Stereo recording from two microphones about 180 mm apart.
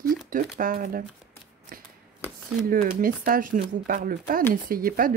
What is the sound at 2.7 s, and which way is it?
Speech, 50° right (ahead or behind).